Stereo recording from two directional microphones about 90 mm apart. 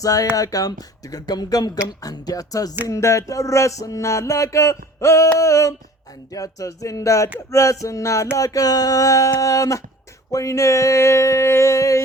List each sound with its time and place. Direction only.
0.0 s music: 40° left (ahead or behind)
0.3 s speech: 40° left (ahead or behind)
2.8 s music: 35° left (ahead or behind)